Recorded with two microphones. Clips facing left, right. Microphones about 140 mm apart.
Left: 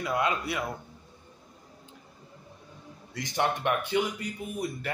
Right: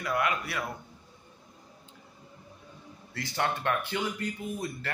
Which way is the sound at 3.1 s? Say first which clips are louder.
Left 2 dB; 20° left (ahead or behind).